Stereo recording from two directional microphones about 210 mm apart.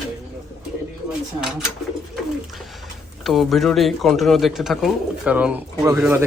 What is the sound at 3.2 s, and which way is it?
A man's voice, centre (ahead or behind).